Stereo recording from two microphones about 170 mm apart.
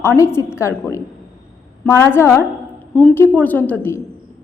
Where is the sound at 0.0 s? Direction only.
15° left (ahead or behind).